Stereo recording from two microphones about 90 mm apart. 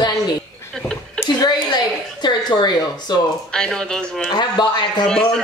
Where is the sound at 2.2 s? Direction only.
55° left (ahead or behind).